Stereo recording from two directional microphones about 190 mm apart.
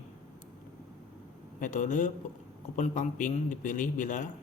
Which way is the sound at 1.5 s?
40° left (ahead or behind).